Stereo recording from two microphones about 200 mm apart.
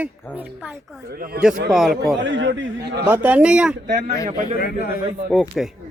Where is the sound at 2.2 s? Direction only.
65° right (ahead or behind).